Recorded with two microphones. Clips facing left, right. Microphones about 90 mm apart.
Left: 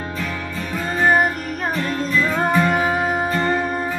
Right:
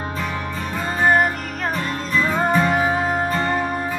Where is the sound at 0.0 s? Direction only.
20° right (ahead or behind).